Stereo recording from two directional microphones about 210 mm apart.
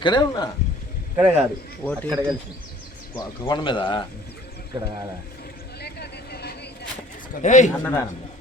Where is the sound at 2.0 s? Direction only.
15° right (ahead or behind).